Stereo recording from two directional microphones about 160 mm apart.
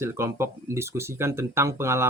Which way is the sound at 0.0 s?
15° right (ahead or behind).